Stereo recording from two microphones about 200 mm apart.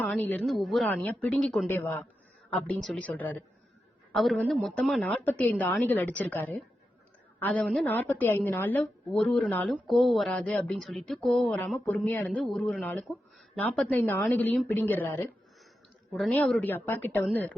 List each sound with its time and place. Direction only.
0.0 s a woman's voice: 10° left (ahead or behind)